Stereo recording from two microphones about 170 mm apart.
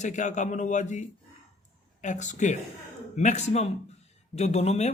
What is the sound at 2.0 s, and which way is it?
Speech, 45° left (ahead or behind).